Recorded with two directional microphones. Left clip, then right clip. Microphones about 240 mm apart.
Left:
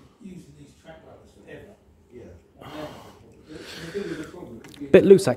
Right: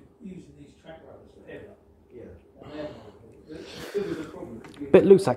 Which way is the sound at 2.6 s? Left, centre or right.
Left.